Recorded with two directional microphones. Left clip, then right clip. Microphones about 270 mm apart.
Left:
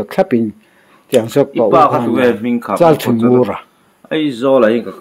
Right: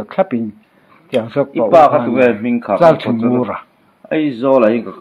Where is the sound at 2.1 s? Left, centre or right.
Centre.